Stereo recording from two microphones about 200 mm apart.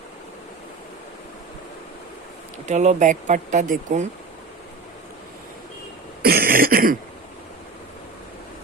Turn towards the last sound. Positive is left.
turn(degrees=-45)  # may be behind; listen again after turning